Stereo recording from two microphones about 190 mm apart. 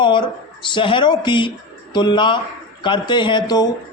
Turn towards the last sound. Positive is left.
turn(degrees=20)  # may be behind; listen again after turning